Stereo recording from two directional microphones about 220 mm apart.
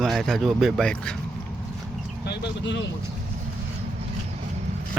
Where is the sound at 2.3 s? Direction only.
55° left (ahead or behind).